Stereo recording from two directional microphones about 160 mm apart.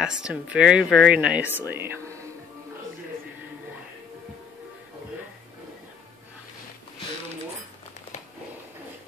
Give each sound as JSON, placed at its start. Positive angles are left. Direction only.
{"t": 0.0, "sound": "speech", "side_deg": -5}